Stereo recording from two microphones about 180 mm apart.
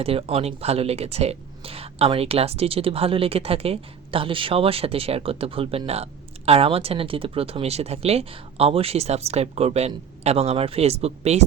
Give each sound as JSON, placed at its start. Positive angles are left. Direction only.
{"t": 0.0, "sound": "speech", "side_deg": -35}